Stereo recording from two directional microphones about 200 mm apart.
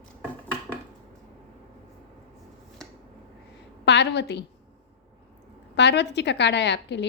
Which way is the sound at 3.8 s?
60° left (ahead or behind).